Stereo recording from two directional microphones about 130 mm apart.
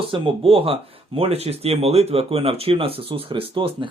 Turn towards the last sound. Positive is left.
turn(degrees=-40)  # may be behind; listen again after turning